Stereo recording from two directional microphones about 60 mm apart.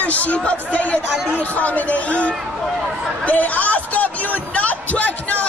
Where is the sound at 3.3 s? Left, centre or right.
Left.